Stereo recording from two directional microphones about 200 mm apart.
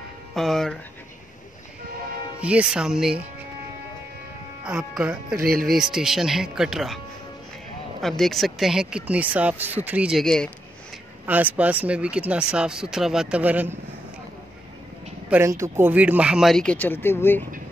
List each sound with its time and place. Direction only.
0.3 s speech: centre (ahead or behind)
2.4 s speech: 5° right (ahead or behind)
4.6 s speech: 5° right (ahead or behind)
5.4 s speech: 45° right (ahead or behind)
5.7 s speech: 5° right (ahead or behind)
8.0 s speech: centre (ahead or behind)
11.2 s speech: 10° right (ahead or behind)
15.2 s speech: 10° right (ahead or behind); by 17.5 s 10° left (ahead or behind)